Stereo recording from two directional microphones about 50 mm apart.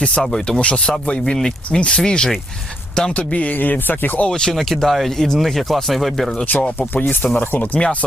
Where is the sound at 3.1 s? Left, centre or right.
Left.